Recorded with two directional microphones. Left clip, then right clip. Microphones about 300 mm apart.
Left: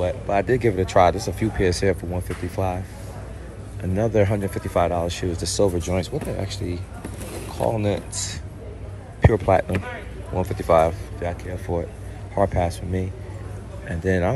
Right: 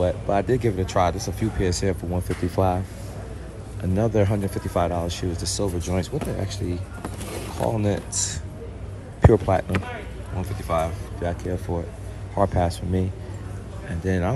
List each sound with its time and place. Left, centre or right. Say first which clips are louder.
0.0 s speech: even; centre
3.9 s speech: left 2 dB; centre
9.3 s speech: left 2 dB; centre